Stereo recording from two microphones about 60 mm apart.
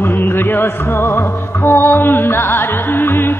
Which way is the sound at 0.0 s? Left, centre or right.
Left.